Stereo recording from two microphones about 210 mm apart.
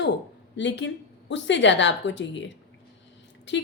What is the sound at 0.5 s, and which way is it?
A woman's voice, 55° left (ahead or behind).